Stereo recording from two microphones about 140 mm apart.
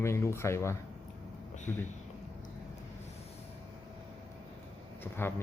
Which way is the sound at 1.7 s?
10° left (ahead or behind).